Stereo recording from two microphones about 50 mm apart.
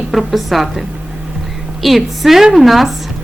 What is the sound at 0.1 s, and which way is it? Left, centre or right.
A woman's voice, centre.